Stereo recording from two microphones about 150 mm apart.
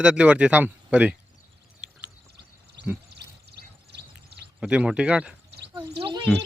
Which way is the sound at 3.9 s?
90° right.